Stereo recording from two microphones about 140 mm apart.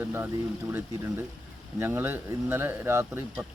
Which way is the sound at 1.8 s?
15° right (ahead or behind).